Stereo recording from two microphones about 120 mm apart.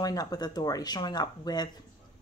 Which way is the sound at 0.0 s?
35° left (ahead or behind).